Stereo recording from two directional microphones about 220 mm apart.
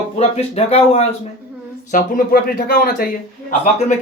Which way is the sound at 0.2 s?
30° left (ahead or behind).